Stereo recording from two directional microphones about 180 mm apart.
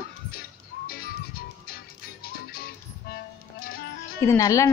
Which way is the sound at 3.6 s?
55° left (ahead or behind).